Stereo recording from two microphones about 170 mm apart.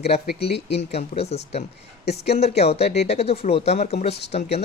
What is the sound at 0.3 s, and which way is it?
Speech, 70° left (ahead or behind).